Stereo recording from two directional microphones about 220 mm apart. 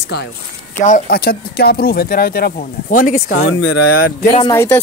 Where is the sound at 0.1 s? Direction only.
50° left (ahead or behind).